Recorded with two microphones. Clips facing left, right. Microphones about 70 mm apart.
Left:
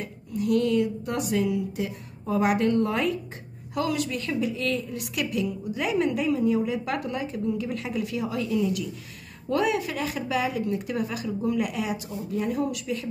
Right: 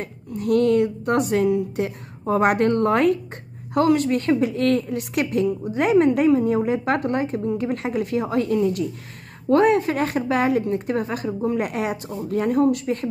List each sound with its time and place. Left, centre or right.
0.0 s a woman's voice: right
3.7 s a woman's voice: right